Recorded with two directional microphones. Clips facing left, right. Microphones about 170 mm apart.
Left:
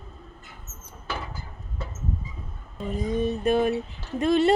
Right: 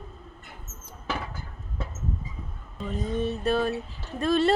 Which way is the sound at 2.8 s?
10° left (ahead or behind).